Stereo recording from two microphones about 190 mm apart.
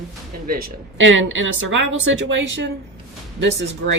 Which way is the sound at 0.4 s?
50° right (ahead or behind).